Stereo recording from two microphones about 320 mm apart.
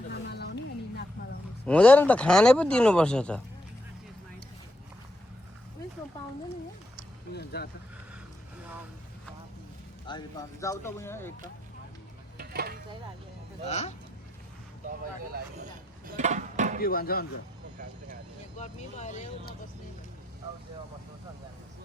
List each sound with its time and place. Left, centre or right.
0.1 s a sound: left
1.6 s speech: centre
7.3 s speech: left
10.1 s speech: centre
12.4 s a sound: right
13.7 s speech: left
14.8 s music: right
16.8 s speech: left
18.6 s speech: left